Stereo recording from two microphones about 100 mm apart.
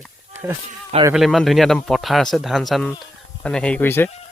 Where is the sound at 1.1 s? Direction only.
Centre (ahead or behind).